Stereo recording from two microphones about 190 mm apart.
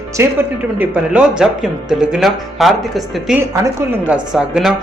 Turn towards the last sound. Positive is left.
turn(degrees=0)  # may be behind; listen again after turning